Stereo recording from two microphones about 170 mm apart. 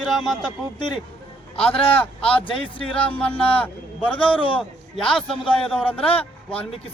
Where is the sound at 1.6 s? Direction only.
35° left (ahead or behind).